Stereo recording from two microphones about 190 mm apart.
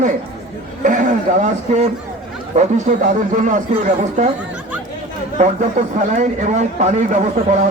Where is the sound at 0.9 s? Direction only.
40° right (ahead or behind).